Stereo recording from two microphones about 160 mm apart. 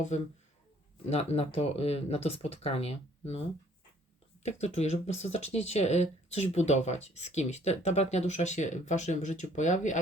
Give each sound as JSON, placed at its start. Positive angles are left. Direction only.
{"t": 1.1, "sound": "speech", "side_deg": 40}
{"t": 4.4, "sound": "speech", "side_deg": 45}